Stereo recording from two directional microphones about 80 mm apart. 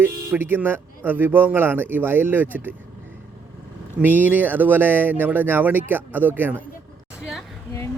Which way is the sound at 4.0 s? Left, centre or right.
Right.